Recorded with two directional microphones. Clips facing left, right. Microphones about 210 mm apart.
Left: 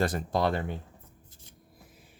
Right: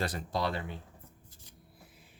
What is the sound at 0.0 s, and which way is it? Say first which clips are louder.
Speech: left 6 dB; 50° left (ahead or behind).